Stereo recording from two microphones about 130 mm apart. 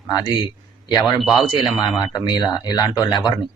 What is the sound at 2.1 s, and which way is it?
Speech, 35° left (ahead or behind).